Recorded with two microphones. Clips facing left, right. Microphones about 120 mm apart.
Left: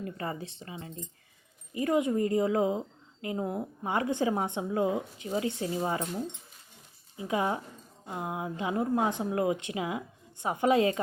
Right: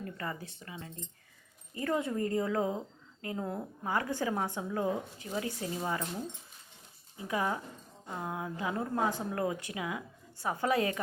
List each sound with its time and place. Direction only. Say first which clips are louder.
0.0 s a woman's voice: left 4 dB; 25° left (ahead or behind)
7.2 s a woman's voice: left 3 dB; 20° left (ahead or behind)